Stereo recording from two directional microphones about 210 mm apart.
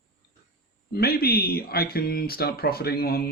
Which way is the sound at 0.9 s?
45° left (ahead or behind).